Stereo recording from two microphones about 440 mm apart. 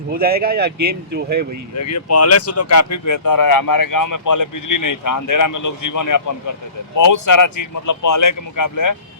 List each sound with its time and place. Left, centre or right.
0.1 s speech: centre
1.7 s speech: left